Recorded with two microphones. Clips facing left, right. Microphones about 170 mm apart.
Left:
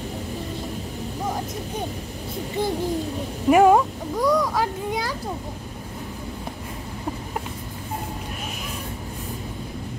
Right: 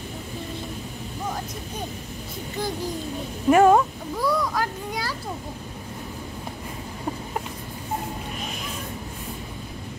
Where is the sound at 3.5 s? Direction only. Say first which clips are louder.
Left 1 dB; 10° left (ahead or behind).